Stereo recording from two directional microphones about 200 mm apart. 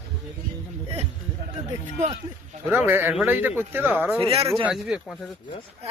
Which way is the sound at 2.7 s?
10° right (ahead or behind).